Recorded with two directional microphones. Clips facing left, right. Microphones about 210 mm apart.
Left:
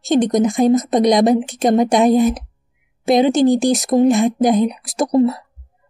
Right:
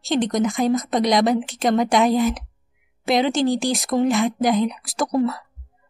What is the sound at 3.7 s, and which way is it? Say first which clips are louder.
A woman's voice: left 6 dB; 20° left (ahead or behind).